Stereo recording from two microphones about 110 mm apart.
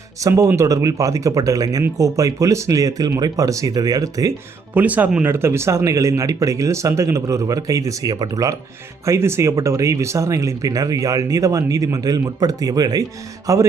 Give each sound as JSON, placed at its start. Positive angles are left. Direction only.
{"t": 0.2, "sound": "speech", "side_deg": -30}
{"t": 4.7, "sound": "speech", "side_deg": -15}